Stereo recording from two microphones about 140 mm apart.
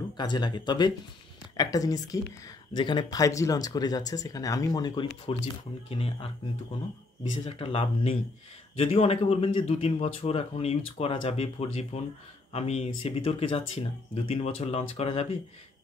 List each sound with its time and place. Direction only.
0.2 s speech: 30° left (ahead or behind)
5.9 s speech: 45° left (ahead or behind)
7.4 s speech: 40° left (ahead or behind)